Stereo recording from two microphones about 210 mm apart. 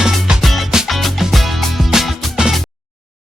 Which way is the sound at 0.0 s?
Centre (ahead or behind).